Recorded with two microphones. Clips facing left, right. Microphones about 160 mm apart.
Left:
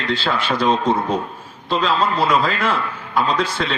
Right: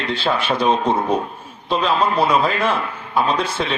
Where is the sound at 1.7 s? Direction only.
10° right (ahead or behind).